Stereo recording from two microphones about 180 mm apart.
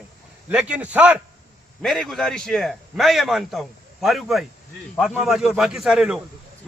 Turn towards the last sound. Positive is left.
turn(degrees=-5)  # may be behind; listen again after turning